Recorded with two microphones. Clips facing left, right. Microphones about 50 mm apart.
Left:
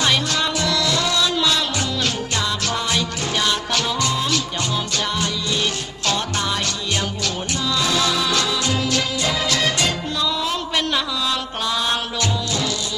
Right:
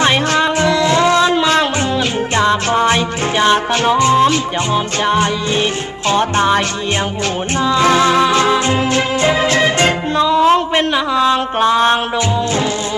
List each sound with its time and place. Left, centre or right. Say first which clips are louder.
0.0 s music: right 7 dB; right
7.6 s music: right 9 dB; right